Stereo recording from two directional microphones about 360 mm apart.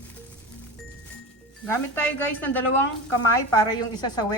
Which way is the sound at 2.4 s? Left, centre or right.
Centre.